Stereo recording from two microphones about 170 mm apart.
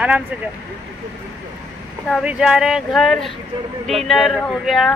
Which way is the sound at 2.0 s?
5° right (ahead or behind).